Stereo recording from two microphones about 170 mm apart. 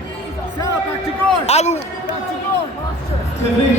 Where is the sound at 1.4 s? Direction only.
40° left (ahead or behind).